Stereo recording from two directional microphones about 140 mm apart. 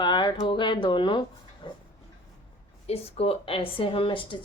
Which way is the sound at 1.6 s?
35° left (ahead or behind).